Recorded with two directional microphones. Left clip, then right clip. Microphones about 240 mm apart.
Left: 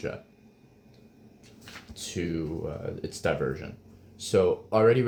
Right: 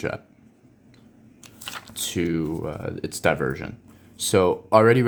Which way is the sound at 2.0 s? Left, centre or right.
Right.